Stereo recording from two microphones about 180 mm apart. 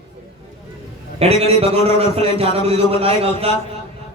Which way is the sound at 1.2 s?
35° right (ahead or behind).